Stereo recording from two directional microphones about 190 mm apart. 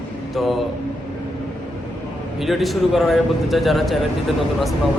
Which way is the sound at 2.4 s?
Centre (ahead or behind).